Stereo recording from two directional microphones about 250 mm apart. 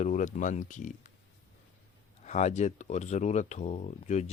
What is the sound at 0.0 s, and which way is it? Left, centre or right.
Speech, left.